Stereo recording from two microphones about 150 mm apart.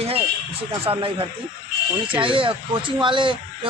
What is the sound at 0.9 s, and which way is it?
Speech, 35° right (ahead or behind).